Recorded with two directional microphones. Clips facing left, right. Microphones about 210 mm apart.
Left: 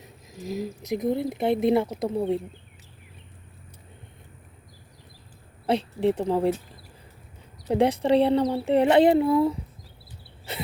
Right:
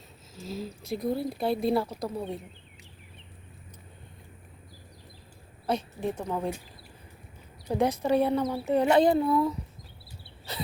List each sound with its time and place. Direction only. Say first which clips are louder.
0.0 s speech: left 5 dB; 15° left (ahead or behind)
5.6 s a woman's voice: left 7 dB; 30° left (ahead or behind)
7.7 s speech: left 4 dB; 30° left (ahead or behind)